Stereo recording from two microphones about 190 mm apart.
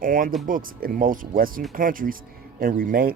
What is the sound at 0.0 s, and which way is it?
Speech, 45° right (ahead or behind).